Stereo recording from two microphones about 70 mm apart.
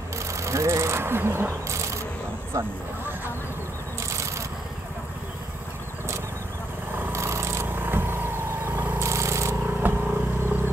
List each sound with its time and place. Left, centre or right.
0.3 s vehicle: right
2.5 s speech: right
7.1 s a sound: right
7.6 s vehicle: right
9.0 s a sound: right
9.8 s vehicle: right